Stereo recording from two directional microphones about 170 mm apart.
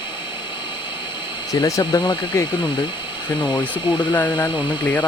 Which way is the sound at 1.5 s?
20° left (ahead or behind).